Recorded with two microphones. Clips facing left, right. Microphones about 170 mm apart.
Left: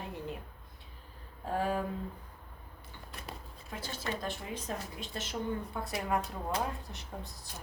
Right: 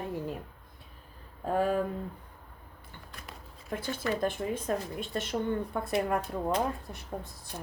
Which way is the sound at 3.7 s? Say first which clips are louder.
Right 6 dB; 55° right (ahead or behind).